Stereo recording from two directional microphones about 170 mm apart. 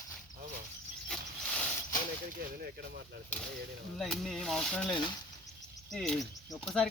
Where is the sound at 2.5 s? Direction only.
65° right (ahead or behind).